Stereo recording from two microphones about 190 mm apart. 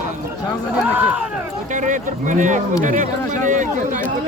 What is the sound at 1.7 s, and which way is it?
Speech, 40° right (ahead or behind).